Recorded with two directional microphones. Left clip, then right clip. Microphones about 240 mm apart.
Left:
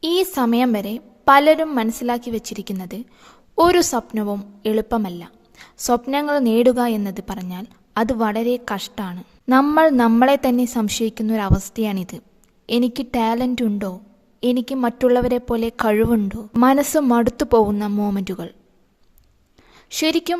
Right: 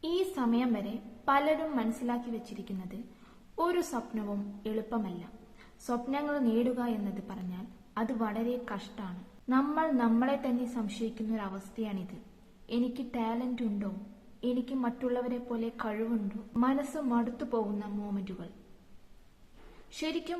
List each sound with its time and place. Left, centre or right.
0.0 s a woman's voice: left
20.0 s a woman's voice: left